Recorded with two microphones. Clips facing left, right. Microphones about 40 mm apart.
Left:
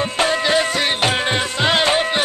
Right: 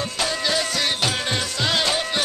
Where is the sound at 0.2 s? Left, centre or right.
Left.